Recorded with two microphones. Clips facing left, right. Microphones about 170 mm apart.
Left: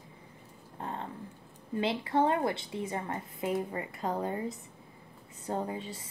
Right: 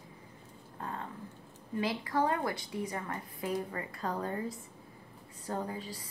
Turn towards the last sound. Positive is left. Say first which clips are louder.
# left 3 dB
turn(degrees=25)  # may be behind; listen again after turning